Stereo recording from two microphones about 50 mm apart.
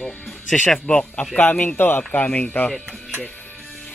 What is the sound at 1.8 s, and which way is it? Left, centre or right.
Speech, left.